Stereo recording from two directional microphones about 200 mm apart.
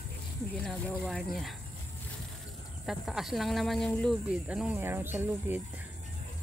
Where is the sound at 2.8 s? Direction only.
Centre (ahead or behind).